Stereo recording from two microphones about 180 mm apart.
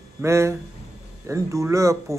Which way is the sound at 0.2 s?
15° right (ahead or behind).